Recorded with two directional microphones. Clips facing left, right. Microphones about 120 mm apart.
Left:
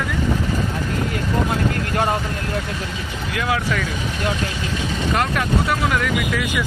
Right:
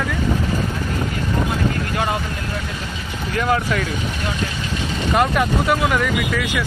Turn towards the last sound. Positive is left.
turn(degrees=0)  # may be behind; listen again after turning